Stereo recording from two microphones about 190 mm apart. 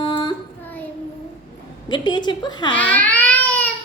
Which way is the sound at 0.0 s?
25° left (ahead or behind).